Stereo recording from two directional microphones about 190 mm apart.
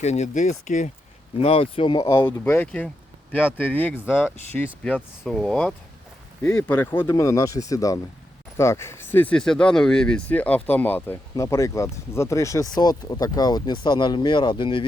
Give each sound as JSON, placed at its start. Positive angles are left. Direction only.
{"t": 0.0, "sound": "speech", "side_deg": 35}